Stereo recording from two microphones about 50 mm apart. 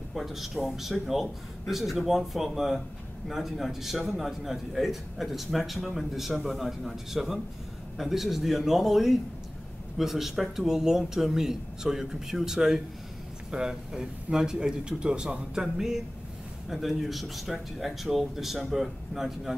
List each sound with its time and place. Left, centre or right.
0.1 s a man's voice: centre